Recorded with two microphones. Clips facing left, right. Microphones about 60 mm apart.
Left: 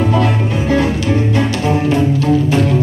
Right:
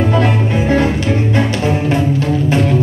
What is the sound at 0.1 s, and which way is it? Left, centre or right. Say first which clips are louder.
Music: right 1 dB; right.